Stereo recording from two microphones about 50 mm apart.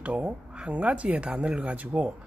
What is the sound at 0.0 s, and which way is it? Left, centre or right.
Speech, right.